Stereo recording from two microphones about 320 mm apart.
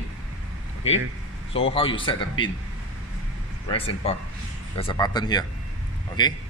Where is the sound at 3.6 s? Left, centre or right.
Centre.